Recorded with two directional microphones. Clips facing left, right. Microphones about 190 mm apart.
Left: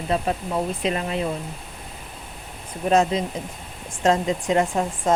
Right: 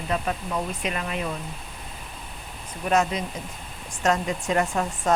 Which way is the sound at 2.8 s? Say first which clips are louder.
Left 4 dB; 30° left (ahead or behind).